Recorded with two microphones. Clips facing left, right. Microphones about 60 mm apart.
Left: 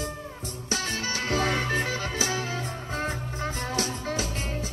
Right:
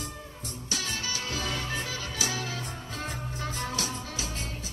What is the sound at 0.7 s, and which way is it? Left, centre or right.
Music, left.